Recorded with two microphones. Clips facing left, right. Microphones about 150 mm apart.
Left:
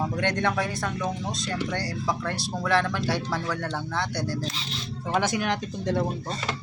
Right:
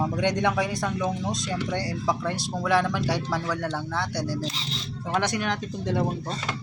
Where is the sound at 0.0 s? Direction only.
15° right (ahead or behind).